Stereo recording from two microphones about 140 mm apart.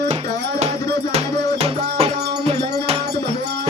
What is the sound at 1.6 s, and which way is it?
Music, 45° right (ahead or behind).